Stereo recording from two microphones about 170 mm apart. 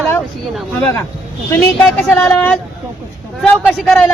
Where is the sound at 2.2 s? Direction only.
10° left (ahead or behind).